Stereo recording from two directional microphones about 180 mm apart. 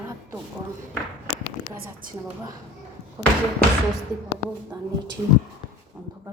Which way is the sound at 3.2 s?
10° right (ahead or behind).